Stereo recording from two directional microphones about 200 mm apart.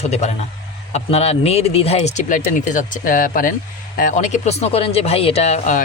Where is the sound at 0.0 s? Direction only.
35° left (ahead or behind).